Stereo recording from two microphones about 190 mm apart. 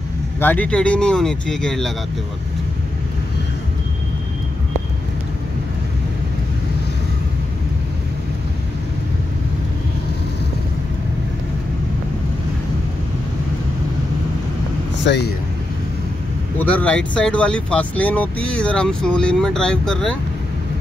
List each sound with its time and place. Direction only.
0.4 s speech: 10° left (ahead or behind)
15.0 s speech: 65° left (ahead or behind)
16.5 s speech: 10° left (ahead or behind)